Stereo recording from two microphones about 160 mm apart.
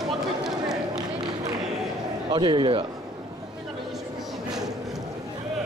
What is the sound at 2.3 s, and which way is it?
Speech, 30° right (ahead or behind).